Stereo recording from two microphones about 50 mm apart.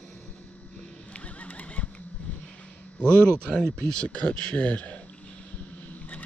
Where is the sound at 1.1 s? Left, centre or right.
Left.